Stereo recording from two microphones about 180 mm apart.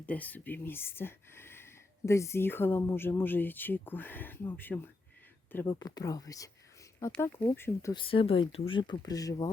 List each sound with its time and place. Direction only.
0.0 s speech: 10° left (ahead or behind)
7.9 s speech: 30° left (ahead or behind)